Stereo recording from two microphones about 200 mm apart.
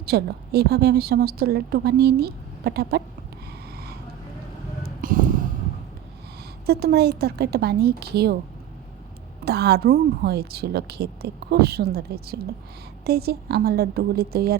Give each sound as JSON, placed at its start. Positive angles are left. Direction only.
{"t": 0.0, "sound": "a woman's voice", "side_deg": -55}
{"t": 3.7, "sound": "vehicle", "side_deg": -50}
{"t": 4.9, "sound": "a sound", "side_deg": -45}
{"t": 6.7, "sound": "a woman's voice", "side_deg": -50}
{"t": 9.4, "sound": "a woman's voice", "side_deg": -55}